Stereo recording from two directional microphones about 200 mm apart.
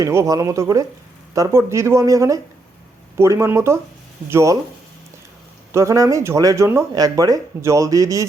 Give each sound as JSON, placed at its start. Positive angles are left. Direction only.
{"t": 0.0, "sound": "speech", "side_deg": -15}
{"t": 5.7, "sound": "speech", "side_deg": -15}